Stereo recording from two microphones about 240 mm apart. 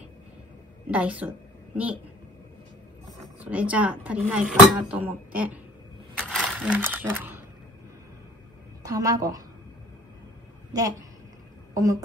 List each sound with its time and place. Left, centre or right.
0.8 s a woman's voice: centre
3.1 s speech: centre
6.1 s a sound: centre
8.8 s a woman's voice: centre
10.7 s a woman's voice: centre